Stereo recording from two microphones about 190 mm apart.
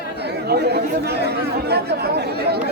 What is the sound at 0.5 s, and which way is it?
Speech, 60° right (ahead or behind).